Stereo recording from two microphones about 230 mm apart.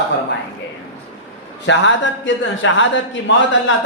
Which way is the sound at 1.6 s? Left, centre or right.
Left.